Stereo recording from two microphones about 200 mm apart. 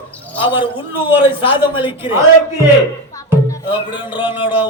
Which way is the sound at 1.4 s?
25° left (ahead or behind).